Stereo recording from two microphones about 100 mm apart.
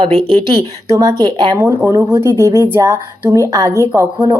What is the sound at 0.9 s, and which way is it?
Speech, 35° right (ahead or behind).